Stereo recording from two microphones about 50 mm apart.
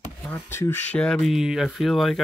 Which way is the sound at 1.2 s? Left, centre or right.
Centre.